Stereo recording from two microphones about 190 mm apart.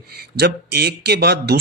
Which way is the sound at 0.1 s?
55° right (ahead or behind).